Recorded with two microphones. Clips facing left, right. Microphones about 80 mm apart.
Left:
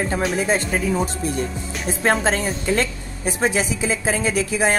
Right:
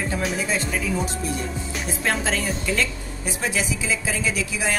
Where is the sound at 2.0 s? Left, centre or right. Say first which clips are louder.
Left 5 dB; left.